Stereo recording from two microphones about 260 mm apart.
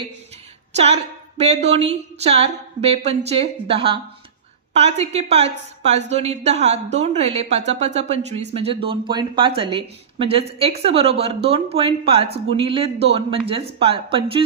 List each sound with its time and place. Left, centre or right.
0.7 s a woman's voice: right